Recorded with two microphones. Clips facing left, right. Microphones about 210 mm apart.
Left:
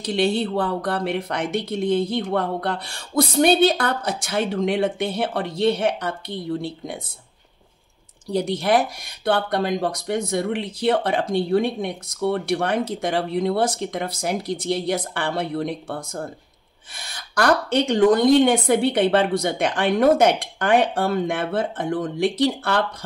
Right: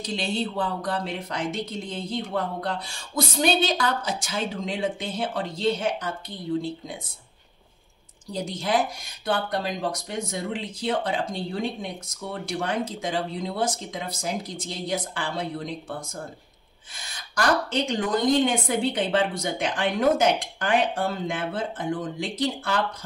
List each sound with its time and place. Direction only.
0.0 s speech: 65° left (ahead or behind)
8.3 s speech: 65° left (ahead or behind)